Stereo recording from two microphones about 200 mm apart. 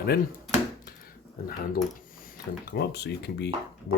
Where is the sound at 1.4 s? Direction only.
50° left (ahead or behind).